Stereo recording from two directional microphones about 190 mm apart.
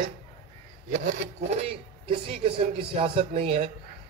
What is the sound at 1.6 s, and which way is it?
A woman's voice, 30° right (ahead or behind).